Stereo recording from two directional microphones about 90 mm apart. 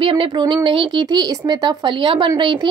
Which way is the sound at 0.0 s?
80° right.